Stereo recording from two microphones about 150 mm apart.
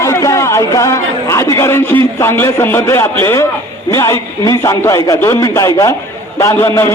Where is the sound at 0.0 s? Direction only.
20° left (ahead or behind).